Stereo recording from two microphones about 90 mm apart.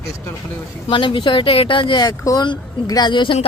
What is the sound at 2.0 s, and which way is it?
Speech, 40° left (ahead or behind).